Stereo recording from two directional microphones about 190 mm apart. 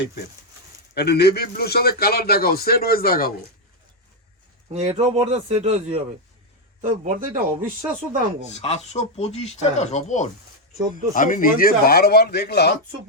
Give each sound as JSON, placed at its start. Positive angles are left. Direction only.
{"t": 0.9, "sound": "a man's voice", "side_deg": 60}
{"t": 4.7, "sound": "speech", "side_deg": -35}
{"t": 8.5, "sound": "speech", "side_deg": 35}